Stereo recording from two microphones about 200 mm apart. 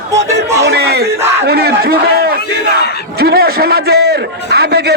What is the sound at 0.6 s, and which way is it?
Battle cry, 55° right (ahead or behind).